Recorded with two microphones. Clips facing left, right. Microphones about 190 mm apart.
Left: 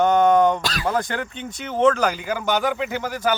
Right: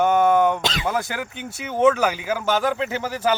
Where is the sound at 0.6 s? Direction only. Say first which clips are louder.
Right 2 dB; 20° right (ahead or behind).